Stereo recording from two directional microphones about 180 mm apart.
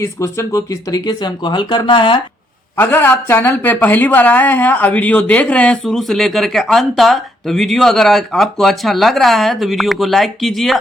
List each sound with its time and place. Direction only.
0.0 s speech: 15° left (ahead or behind)
2.7 s speech: 10° left (ahead or behind)